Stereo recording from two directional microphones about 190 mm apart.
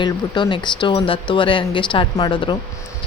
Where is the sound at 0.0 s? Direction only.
25° left (ahead or behind).